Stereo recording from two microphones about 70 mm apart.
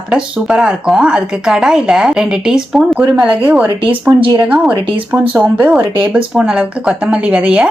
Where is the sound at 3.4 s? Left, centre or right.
Right.